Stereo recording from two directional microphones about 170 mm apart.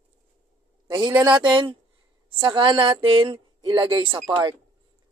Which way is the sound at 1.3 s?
25° right (ahead or behind).